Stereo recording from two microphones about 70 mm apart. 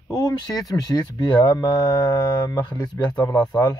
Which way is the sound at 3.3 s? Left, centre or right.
Left.